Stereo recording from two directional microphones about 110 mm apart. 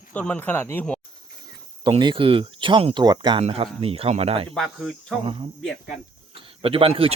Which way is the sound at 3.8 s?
60° right (ahead or behind).